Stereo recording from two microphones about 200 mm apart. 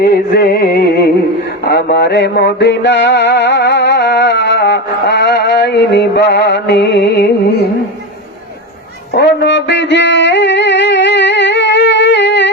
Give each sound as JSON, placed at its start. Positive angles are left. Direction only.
{"t": 0.0, "sound": "music", "side_deg": 55}
{"t": 9.1, "sound": "music", "side_deg": 60}